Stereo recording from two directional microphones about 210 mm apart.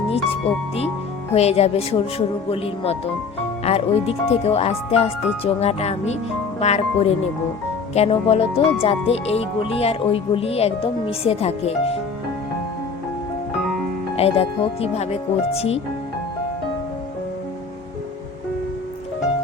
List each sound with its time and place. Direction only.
1.3 s speech: 30° left (ahead or behind)
14.2 s speech: 30° left (ahead or behind)